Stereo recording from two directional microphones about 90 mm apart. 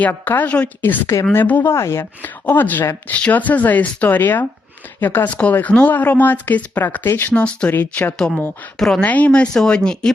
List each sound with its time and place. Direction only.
0.0 s speech: 20° left (ahead or behind)
1.7 s speech: 30° left (ahead or behind)
2.2 s speech: 20° left (ahead or behind)
7.3 s speech: 15° left (ahead or behind)
8.8 s speech: 5° left (ahead or behind)
9.0 s speech: 15° left (ahead or behind)